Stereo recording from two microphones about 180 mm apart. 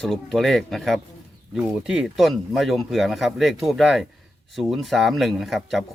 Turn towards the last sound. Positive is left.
turn(degrees=0)  # may be behind; listen again after turning